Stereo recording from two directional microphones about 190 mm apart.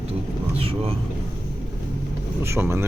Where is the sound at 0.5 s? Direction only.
30° right (ahead or behind).